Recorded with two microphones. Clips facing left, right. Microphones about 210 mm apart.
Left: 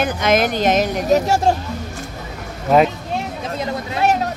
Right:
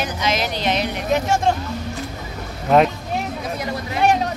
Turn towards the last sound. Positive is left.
turn(degrees=5)  # may be behind; listen again after turning